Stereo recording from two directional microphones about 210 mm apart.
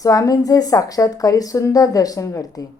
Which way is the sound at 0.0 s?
15° left (ahead or behind).